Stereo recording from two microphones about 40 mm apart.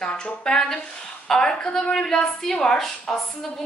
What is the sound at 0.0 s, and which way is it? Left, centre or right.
Speech, left.